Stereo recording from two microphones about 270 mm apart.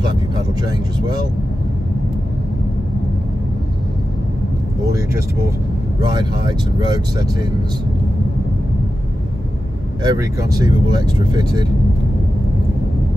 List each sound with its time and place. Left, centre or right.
5.9 s speech: centre
10.0 s speech: centre